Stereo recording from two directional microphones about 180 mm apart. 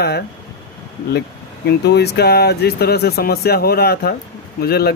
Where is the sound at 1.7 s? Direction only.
65° left (ahead or behind).